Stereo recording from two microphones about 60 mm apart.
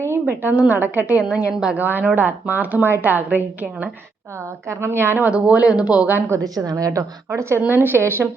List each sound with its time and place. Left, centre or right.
0.0 s a sound: right
0.4 s speech: right
1.4 s a woman's voice: centre
1.7 s speech: right
4.7 s speech: right
5.2 s speech: right
6.1 s speech: right
6.4 s a woman's voice: right
7.3 s speech: right
7.7 s speech: right